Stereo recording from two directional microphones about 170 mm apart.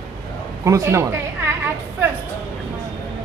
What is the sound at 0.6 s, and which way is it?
Speech, 15° right (ahead or behind).